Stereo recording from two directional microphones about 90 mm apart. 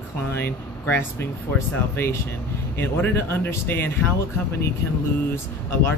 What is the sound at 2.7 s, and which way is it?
Speech, 25° left (ahead or behind).